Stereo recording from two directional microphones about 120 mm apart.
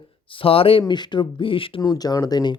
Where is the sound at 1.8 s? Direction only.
30° left (ahead or behind).